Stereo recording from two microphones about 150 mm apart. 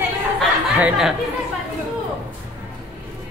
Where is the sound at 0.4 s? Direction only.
5° right (ahead or behind).